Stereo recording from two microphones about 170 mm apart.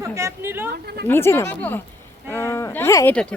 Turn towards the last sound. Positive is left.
turn(degrees=5)  # may be behind; listen again after turning